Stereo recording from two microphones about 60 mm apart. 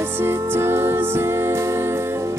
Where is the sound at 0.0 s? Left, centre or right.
Right.